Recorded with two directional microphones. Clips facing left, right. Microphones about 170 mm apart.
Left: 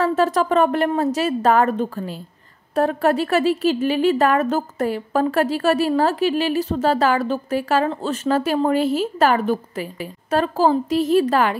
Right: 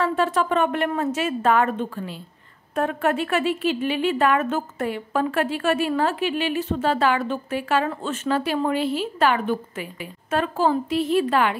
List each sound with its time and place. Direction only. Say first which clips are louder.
0.0 s speech: left 3 dB; 40° left (ahead or behind)